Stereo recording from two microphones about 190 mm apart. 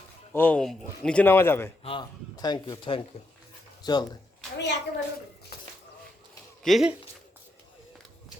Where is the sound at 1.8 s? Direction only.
25° left (ahead or behind).